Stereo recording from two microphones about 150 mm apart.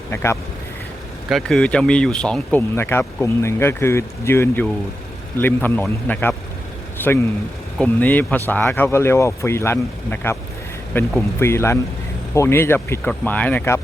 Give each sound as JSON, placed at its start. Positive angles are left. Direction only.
{"t": 0.1, "sound": "speech", "side_deg": 15}
{"t": 1.3, "sound": "speech", "side_deg": 0}